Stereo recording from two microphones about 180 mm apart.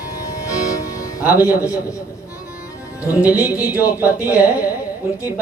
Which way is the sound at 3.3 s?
15° left (ahead or behind).